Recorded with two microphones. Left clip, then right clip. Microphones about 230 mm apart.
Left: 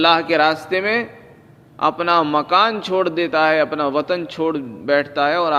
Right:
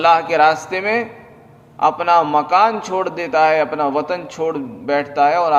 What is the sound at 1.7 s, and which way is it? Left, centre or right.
A man's voice, left.